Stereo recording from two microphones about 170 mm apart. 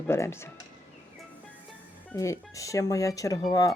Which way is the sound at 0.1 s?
15° left (ahead or behind).